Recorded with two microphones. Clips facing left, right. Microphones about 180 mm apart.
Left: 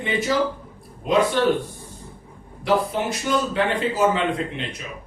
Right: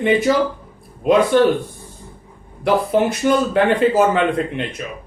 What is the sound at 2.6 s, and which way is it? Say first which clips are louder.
Speech: right 5 dB; 55° right (ahead or behind).